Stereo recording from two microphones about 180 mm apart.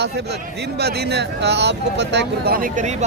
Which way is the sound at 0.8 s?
65° right (ahead or behind).